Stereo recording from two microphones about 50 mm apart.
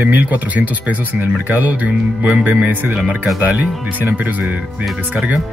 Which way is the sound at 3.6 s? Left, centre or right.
Right.